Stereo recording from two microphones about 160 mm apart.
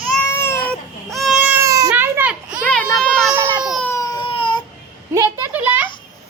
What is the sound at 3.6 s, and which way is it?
Baby cry, centre (ahead or behind).